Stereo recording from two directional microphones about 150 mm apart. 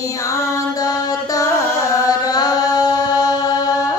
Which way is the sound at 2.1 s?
25° left (ahead or behind).